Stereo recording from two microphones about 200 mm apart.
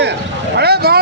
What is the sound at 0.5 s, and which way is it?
Vehicle, 55° right (ahead or behind).